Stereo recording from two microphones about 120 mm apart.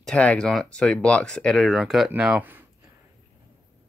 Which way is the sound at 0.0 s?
10° left (ahead or behind).